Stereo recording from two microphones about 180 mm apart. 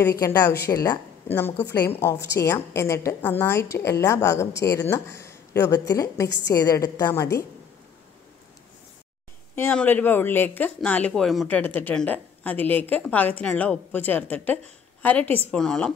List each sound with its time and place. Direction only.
0.0 s a woman's voice: 20° left (ahead or behind)
9.6 s a woman's voice: 10° left (ahead or behind)